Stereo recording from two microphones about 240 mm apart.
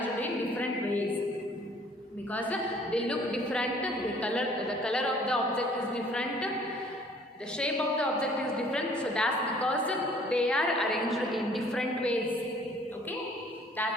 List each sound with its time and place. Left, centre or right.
0.2 s a sound: centre
2.3 s a woman's voice: centre
7.6 s a woman's voice: centre